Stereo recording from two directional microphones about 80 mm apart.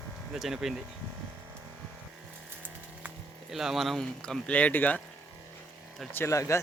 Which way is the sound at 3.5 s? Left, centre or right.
Centre.